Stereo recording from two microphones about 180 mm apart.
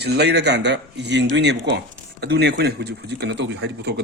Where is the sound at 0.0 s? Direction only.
65° right (ahead or behind).